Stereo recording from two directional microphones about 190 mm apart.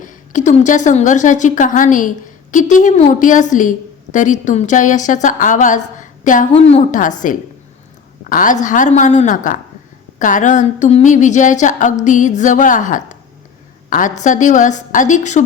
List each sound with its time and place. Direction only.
0.0 s a woman's voice: 40° left (ahead or behind)
8.2 s a woman's voice: 45° left (ahead or behind)